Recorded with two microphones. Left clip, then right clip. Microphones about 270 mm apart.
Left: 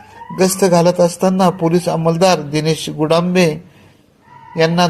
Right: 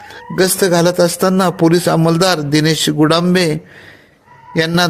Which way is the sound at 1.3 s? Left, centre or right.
Right.